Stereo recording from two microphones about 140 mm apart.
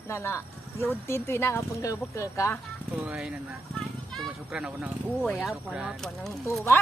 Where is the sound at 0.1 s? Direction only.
20° left (ahead or behind).